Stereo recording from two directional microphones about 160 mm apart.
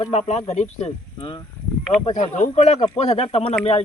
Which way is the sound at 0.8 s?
35° left (ahead or behind).